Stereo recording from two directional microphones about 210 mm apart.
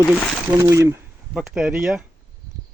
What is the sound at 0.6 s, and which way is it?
Speech, 15° right (ahead or behind).